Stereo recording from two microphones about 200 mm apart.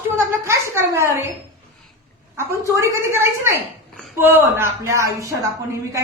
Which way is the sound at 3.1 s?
10° right (ahead or behind).